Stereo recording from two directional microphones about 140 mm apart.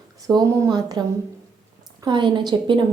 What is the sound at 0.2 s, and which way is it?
Speech, 25° right (ahead or behind).